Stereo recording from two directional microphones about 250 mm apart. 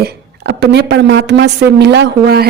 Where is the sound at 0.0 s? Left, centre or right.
Right.